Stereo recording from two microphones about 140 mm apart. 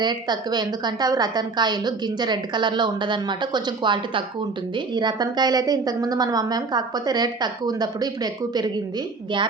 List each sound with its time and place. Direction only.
0.0 s a woman's voice: 30° right (ahead or behind)